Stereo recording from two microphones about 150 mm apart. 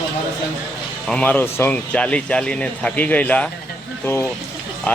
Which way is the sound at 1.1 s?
10° left (ahead or behind).